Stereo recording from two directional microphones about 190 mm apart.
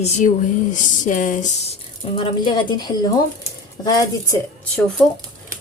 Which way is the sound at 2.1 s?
25° left (ahead or behind).